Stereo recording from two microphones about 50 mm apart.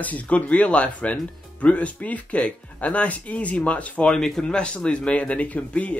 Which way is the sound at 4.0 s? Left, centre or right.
Centre.